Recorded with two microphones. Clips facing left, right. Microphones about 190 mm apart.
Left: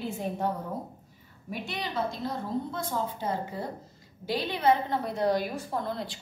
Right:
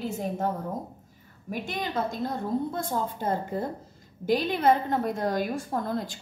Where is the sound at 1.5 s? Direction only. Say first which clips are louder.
Right 3 dB; 50° right (ahead or behind).